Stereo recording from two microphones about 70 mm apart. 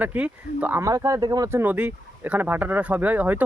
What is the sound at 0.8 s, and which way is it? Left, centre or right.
Speech, right.